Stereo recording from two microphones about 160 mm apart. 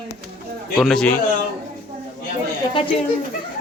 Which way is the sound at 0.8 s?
5° left (ahead or behind).